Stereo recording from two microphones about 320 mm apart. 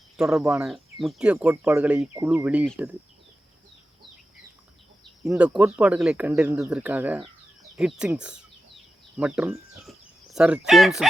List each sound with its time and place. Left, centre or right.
0.2 s speech: centre
5.2 s speech: centre